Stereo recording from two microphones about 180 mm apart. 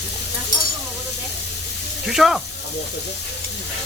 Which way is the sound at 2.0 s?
5° right (ahead or behind).